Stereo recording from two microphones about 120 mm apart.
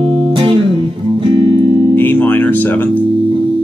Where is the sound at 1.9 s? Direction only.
15° left (ahead or behind).